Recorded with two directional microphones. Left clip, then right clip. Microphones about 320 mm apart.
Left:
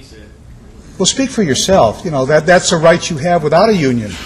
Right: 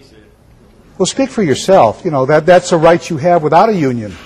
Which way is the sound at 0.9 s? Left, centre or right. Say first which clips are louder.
Even; centre.